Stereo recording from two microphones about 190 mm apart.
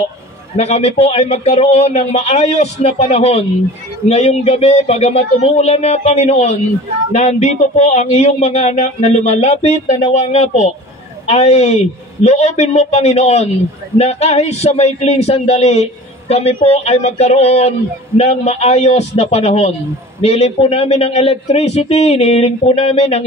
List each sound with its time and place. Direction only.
0.6 s a man's voice: 35° left (ahead or behind)